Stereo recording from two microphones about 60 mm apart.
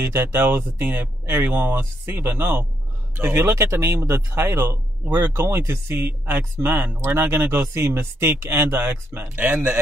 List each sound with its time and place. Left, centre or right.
0.0 s speech: right
7.0 s speech: right
7.2 s speech: right